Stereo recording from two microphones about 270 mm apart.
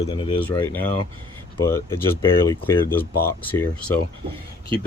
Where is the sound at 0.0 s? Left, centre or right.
Centre.